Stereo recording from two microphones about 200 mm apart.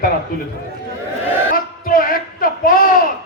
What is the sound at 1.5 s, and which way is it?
A man's voice, 45° left (ahead or behind).